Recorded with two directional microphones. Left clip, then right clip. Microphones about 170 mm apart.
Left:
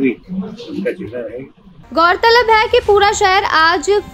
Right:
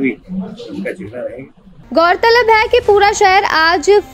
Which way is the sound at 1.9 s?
20° right (ahead or behind).